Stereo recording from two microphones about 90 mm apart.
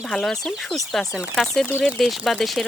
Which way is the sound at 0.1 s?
5° left (ahead or behind).